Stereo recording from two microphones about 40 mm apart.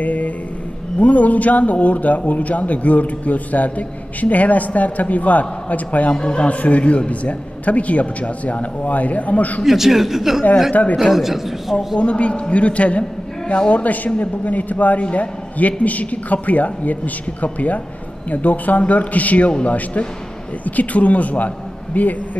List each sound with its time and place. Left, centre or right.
0.0 s mantra: left
0.9 s a man's voice: left
6.1 s a man's voice: left
9.7 s a man's voice: centre
10.7 s a man's voice: left
11.0 s a man's voice: centre
12.0 s a man's voice: left